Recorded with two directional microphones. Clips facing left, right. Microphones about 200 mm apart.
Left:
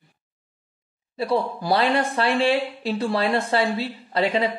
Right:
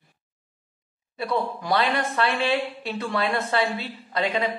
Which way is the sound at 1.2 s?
30° left (ahead or behind).